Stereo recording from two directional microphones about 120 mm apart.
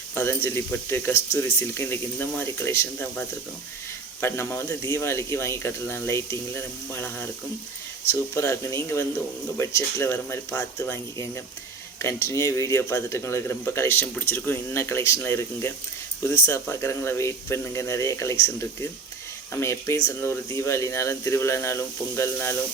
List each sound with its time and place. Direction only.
0.1 s speech: 20° left (ahead or behind)